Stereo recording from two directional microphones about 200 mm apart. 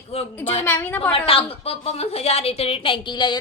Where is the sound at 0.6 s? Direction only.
10° left (ahead or behind).